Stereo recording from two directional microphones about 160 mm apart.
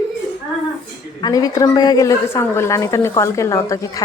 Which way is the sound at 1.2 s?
25° left (ahead or behind).